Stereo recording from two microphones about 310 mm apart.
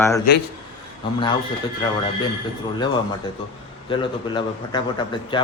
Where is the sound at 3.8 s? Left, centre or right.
Centre.